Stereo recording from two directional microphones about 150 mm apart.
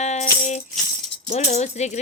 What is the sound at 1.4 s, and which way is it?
Music, 50° left (ahead or behind).